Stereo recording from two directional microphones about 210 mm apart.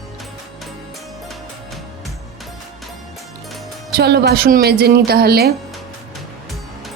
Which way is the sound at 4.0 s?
50° right (ahead or behind).